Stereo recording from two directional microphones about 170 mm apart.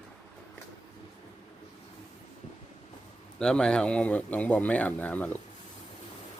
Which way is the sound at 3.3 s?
5° left (ahead or behind).